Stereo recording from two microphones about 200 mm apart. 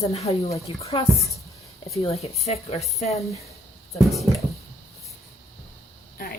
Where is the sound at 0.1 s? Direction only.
30° left (ahead or behind).